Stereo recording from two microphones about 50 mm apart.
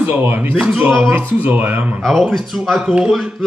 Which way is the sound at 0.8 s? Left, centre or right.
Right.